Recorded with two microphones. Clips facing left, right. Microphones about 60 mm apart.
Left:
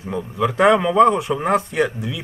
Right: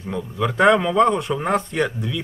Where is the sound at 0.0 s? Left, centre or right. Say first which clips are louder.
Left 2 dB; centre.